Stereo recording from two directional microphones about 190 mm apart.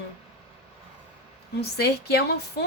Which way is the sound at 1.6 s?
60° left (ahead or behind).